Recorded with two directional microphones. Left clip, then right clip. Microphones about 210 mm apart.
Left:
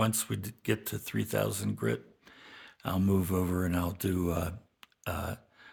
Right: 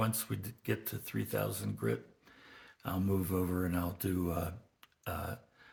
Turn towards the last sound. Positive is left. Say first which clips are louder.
# left 4 dB
turn(degrees=60)  # may be behind; listen again after turning